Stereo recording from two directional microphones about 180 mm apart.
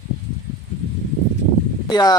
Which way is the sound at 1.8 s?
20° left (ahead or behind).